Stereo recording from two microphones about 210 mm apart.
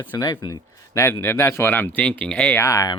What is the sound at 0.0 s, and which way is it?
Speech, 15° left (ahead or behind).